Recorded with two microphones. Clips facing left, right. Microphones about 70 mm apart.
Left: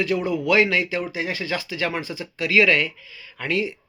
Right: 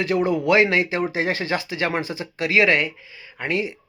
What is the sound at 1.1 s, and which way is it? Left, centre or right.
Speech, right.